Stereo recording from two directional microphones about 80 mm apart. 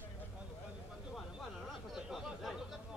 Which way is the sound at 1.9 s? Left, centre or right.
Centre.